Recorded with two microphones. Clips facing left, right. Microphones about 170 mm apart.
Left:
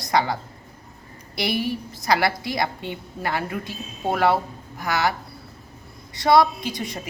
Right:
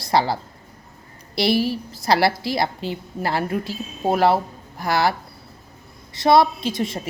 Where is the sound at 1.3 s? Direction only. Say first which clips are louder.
Right 5 dB; 30° right (ahead or behind).